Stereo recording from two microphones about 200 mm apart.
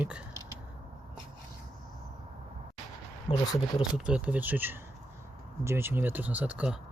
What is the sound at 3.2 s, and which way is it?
Speech, 20° left (ahead or behind).